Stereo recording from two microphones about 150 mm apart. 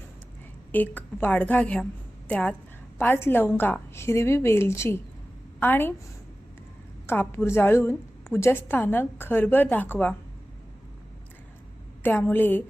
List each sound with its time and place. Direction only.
0.7 s a woman's voice: 10° left (ahead or behind)
7.1 s a woman's voice: 15° left (ahead or behind)
12.0 s a woman's voice: 15° left (ahead or behind)